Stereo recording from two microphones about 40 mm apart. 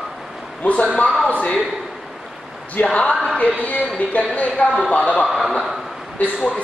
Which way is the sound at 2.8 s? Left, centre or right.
Left.